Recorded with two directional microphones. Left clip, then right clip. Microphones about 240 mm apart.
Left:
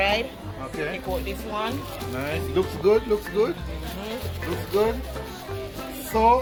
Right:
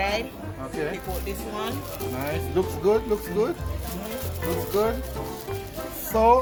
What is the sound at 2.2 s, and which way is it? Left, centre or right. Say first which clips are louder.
Speech: left 1 dB; centre.